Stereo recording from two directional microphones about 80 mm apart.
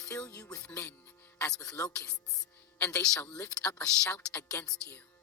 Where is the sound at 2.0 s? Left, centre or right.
Left.